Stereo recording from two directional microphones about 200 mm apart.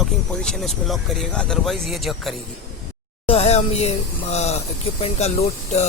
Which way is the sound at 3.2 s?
30° left (ahead or behind).